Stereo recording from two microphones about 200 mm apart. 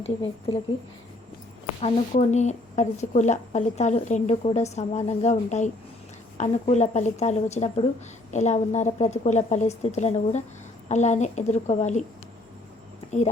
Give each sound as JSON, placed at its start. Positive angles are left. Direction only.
{"t": 0.0, "sound": "speech", "side_deg": 30}
{"t": 1.8, "sound": "speech", "side_deg": 35}